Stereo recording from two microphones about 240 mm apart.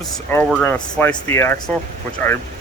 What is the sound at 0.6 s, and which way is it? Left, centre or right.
Speech, centre.